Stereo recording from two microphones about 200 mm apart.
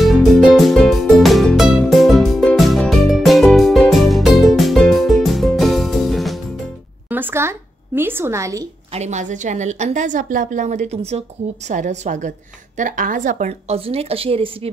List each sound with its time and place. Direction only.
0.0 s music: centre (ahead or behind)
7.1 s speech: 10° right (ahead or behind)
8.9 s a woman's voice: 35° right (ahead or behind)